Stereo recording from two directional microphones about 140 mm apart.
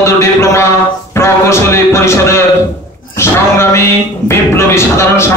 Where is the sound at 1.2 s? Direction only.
20° left (ahead or behind).